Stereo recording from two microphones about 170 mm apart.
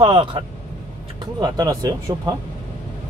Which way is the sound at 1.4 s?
20° right (ahead or behind).